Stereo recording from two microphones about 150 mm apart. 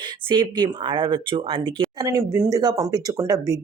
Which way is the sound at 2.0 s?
20° right (ahead or behind).